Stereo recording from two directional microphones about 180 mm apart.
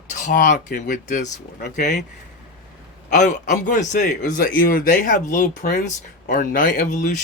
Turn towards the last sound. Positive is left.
turn(degrees=45)  # may be behind; listen again after turning